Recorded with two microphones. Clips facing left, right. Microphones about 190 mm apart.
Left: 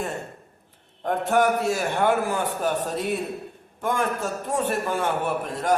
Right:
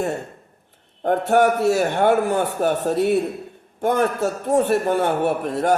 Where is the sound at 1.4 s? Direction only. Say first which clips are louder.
Right 4 dB; 70° right (ahead or behind).